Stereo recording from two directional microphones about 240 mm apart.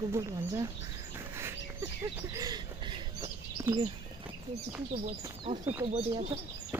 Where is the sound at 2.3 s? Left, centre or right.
Centre.